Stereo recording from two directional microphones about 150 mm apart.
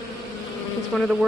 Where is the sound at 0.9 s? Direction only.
5° left (ahead or behind).